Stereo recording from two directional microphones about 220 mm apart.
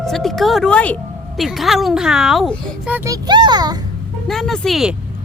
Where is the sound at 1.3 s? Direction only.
Centre (ahead or behind).